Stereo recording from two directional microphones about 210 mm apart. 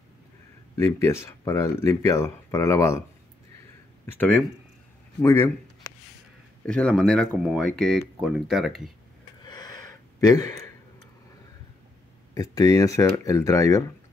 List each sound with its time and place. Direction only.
0.7 s speech: 15° left (ahead or behind)
4.0 s speech: 10° left (ahead or behind)
6.6 s speech: 5° left (ahead or behind)
9.4 s gasp: 20° left (ahead or behind)
12.4 s speech: 15° left (ahead or behind)